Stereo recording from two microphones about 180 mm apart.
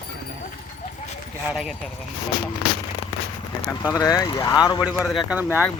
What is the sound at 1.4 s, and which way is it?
Speech, centre (ahead or behind).